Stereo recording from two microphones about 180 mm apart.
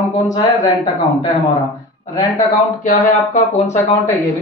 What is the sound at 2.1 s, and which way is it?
Speech, 20° left (ahead or behind).